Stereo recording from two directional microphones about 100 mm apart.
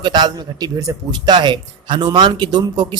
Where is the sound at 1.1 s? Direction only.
50° right (ahead or behind).